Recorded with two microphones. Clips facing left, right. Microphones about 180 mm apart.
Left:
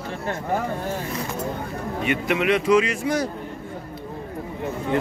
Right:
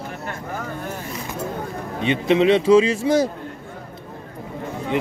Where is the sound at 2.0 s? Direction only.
25° right (ahead or behind).